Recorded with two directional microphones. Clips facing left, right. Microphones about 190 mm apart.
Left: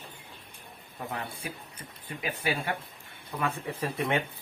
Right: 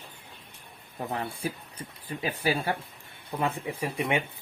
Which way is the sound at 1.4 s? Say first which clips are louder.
Right 6 dB; 35° right (ahead or behind).